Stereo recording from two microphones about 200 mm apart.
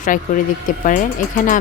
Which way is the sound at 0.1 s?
40° left (ahead or behind).